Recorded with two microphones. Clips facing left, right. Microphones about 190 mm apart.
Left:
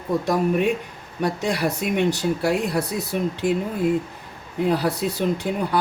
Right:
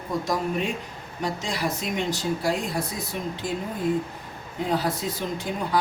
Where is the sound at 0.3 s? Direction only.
60° left (ahead or behind).